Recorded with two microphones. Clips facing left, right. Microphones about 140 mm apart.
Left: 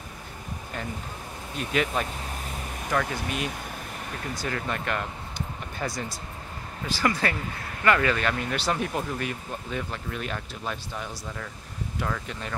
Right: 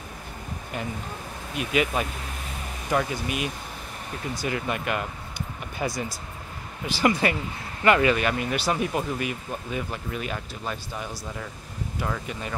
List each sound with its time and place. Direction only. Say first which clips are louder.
1.6 s speech: right 2 dB; 5° right (ahead or behind)
2.9 s speech: right 2 dB; 15° right (ahead or behind)
4.4 s speech: right 3 dB; 10° right (ahead or behind)
6.9 s speech: right 4 dB; 15° right (ahead or behind)